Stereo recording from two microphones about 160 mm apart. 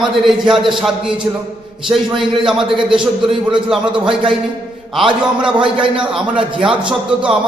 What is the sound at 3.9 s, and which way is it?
Speech, 30° right (ahead or behind).